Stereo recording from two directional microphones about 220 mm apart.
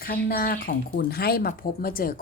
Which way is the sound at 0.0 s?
45° left (ahead or behind).